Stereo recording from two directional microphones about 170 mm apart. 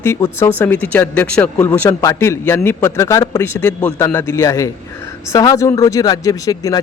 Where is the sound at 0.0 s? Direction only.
15° left (ahead or behind).